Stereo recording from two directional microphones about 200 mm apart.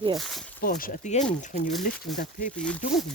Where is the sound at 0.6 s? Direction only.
45° left (ahead or behind).